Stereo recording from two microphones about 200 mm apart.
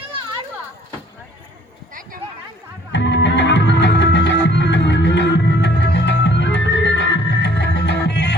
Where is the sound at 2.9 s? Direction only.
60° left (ahead or behind).